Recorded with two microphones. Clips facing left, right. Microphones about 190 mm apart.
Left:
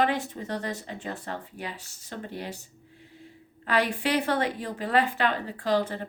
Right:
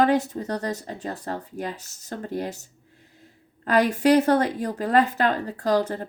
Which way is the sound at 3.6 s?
45° right (ahead or behind).